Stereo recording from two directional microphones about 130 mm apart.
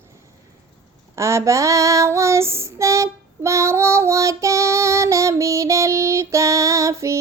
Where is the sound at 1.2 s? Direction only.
20° right (ahead or behind).